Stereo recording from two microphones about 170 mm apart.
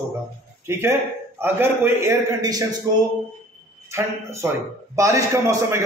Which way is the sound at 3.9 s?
15° right (ahead or behind).